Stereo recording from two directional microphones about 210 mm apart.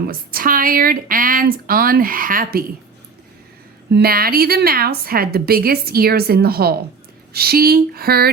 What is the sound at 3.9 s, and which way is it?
A woman's voice, 50° right (ahead or behind).